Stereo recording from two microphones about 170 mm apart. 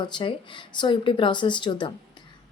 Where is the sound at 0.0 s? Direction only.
25° left (ahead or behind).